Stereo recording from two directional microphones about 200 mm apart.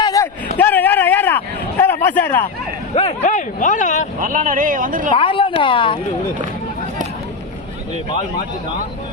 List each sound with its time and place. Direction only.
0.0 s a sound: 15° left (ahead or behind)
2.9 s speech: 30° left (ahead or behind)
4.2 s speech: 40° right (ahead or behind)
5.1 s speech: 25° left (ahead or behind)